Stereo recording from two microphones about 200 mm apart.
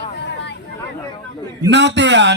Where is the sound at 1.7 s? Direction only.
60° right (ahead or behind).